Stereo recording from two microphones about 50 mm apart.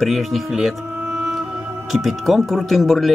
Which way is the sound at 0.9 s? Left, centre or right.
Right.